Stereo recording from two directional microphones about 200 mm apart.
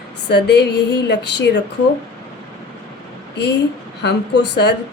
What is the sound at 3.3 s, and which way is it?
A woman's voice, 60° left (ahead or behind).